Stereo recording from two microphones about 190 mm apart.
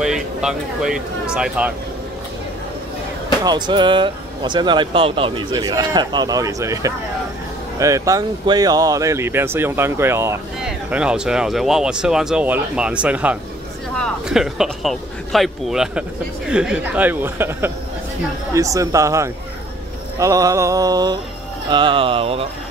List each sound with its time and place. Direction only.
0.0 s speech: 5° right (ahead or behind)
3.4 s speech: 25° right (ahead or behind)